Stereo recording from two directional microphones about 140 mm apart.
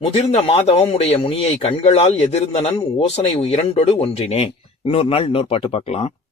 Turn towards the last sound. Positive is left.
turn(degrees=45)  # may be behind; listen again after turning